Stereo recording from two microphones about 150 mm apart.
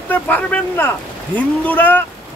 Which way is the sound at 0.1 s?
10° left (ahead or behind).